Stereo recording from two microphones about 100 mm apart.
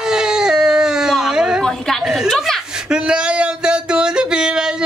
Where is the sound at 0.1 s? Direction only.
5° right (ahead or behind).